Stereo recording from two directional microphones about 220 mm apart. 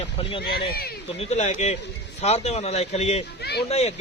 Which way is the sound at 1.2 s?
30° left (ahead or behind).